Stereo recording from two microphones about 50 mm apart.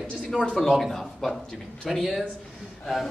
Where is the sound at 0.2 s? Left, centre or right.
Centre.